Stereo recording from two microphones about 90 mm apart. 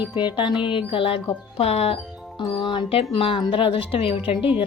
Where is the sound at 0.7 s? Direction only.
80° left.